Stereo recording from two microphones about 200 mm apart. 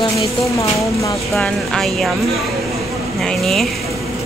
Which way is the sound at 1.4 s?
5° left (ahead or behind).